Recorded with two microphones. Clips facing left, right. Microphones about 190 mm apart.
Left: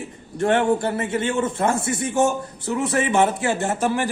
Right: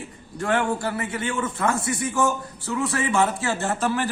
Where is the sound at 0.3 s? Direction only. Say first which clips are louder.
Left 5 dB; 25° left (ahead or behind).